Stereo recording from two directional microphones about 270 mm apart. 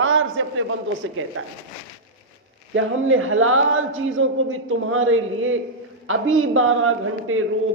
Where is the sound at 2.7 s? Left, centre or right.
Right.